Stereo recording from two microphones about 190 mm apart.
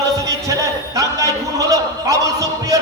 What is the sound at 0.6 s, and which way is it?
A man's voice, 20° right (ahead or behind).